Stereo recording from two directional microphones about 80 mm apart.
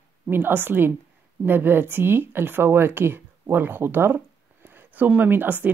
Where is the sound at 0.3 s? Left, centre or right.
Right.